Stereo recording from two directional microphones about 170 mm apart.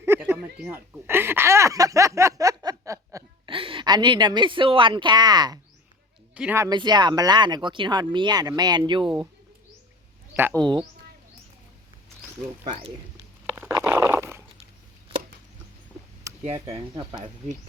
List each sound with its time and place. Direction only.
0.0 s speech: 15° right (ahead or behind)
3.5 s a woman's voice: 30° right (ahead or behind)
6.3 s speech: 5° right (ahead or behind)
6.6 s speech: 25° right (ahead or behind)
10.3 s speech: 10° right (ahead or behind)
10.6 s speech: 25° right (ahead or behind)
13.6 s dog: 15° right (ahead or behind)
16.5 s speech: 30° right (ahead or behind)